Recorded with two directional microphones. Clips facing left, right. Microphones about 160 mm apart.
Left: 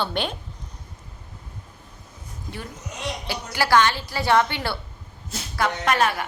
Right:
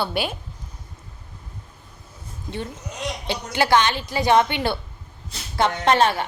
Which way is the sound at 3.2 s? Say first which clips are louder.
Right 3 dB; 20° right (ahead or behind).